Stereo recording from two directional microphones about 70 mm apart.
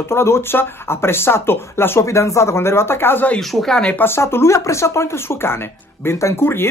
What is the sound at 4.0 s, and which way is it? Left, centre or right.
Speech, left.